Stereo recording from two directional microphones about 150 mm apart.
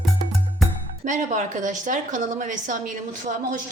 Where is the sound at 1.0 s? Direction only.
55° right (ahead or behind).